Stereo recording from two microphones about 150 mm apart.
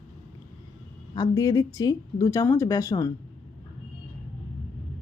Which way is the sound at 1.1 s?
25° left (ahead or behind).